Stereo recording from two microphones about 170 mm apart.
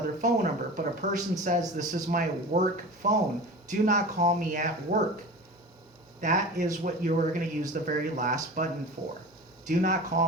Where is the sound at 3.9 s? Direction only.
50° right (ahead or behind).